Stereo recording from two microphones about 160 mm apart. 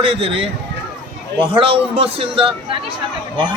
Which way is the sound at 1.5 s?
35° right (ahead or behind).